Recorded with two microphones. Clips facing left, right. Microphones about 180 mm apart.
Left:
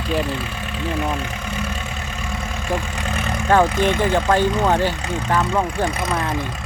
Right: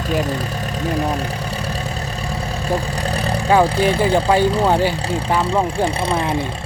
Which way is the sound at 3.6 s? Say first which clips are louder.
Right 2 dB; 35° right (ahead or behind).